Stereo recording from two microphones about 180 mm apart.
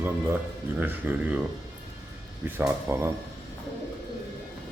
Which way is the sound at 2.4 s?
10° right (ahead or behind).